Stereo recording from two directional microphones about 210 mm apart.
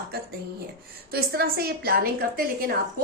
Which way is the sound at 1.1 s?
45° right (ahead or behind).